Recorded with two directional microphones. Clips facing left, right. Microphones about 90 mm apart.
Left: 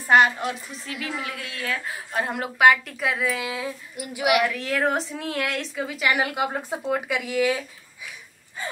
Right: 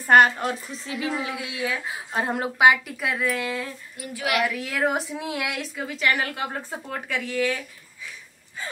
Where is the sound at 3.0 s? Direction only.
Centre (ahead or behind).